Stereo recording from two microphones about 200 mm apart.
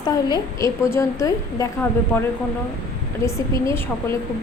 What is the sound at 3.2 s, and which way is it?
Speech, 15° left (ahead or behind).